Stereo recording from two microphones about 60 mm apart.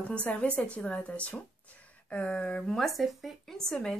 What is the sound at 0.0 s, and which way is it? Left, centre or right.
A woman's voice, left.